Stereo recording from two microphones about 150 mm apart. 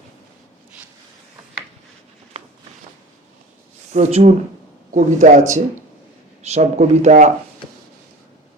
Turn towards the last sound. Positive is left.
turn(degrees=-50)  # may be behind; listen again after turning